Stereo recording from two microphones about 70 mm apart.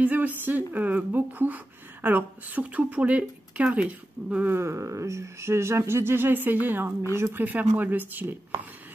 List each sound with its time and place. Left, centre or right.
0.0 s speech: right
4.5 s speech: right